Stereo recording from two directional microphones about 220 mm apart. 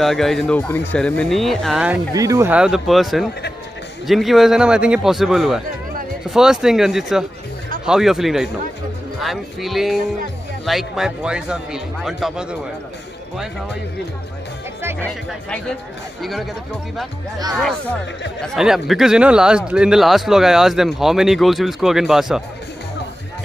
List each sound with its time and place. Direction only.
0.0 s speech: centre (ahead or behind)
2.1 s speech: 15° right (ahead or behind)
15.0 s speech: 5° left (ahead or behind)
18.4 s speech: centre (ahead or behind)